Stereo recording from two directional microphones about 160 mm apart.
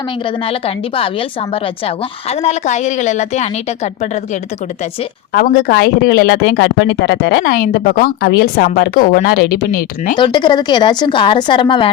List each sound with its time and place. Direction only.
0.3 s a woman's voice: 35° left (ahead or behind)
5.3 s a woman's voice: 60° left (ahead or behind)
10.2 s a woman's voice: 30° left (ahead or behind)